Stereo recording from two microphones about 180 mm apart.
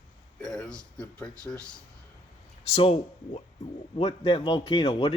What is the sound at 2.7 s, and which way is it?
A man's voice, 35° left (ahead or behind).